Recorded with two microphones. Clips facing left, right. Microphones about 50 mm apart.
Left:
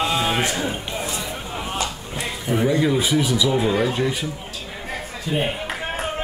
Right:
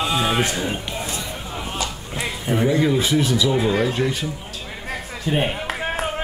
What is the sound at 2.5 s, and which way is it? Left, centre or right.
Speech, centre.